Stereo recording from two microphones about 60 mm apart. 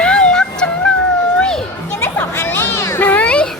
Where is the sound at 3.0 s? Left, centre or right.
Left.